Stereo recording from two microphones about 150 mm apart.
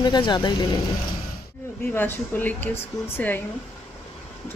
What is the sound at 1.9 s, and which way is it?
Speech, 15° left (ahead or behind).